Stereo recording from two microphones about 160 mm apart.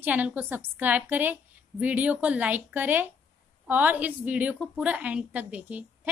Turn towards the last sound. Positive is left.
turn(degrees=-10)  # may be behind; listen again after turning